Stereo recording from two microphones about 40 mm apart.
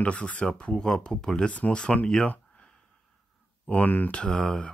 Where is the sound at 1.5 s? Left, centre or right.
Left.